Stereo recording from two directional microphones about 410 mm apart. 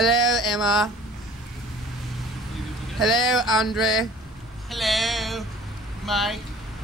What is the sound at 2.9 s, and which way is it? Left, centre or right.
Speech, centre.